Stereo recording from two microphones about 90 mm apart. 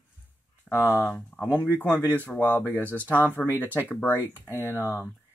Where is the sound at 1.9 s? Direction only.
25° right (ahead or behind).